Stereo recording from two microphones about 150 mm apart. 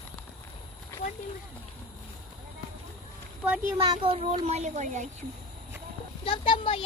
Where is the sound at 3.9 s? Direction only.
40° right (ahead or behind).